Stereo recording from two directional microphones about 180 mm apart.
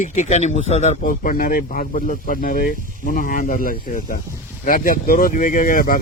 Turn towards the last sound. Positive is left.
turn(degrees=50)  # may be behind; listen again after turning